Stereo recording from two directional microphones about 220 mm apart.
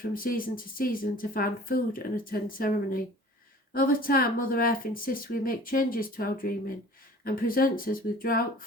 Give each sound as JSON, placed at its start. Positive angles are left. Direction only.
{"t": 0.0, "sound": "speech", "side_deg": 40}